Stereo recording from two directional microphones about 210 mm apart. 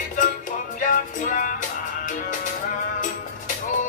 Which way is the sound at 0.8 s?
40° left (ahead or behind).